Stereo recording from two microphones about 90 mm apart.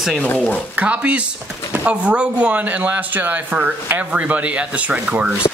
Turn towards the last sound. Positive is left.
turn(degrees=-15)  # may be behind; listen again after turning